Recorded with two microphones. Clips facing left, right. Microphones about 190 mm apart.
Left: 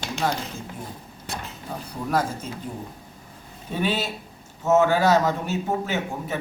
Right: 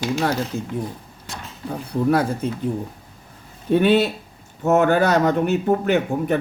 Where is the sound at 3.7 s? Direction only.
60° right (ahead or behind).